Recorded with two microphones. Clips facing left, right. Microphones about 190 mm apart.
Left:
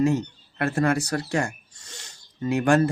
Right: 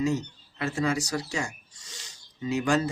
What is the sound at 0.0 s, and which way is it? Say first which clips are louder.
Speech: left 5 dB; 55° left (ahead or behind).